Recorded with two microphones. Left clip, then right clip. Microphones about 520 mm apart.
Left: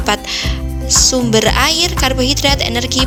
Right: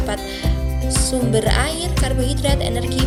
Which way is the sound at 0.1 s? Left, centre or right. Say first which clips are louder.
Left 8 dB; centre.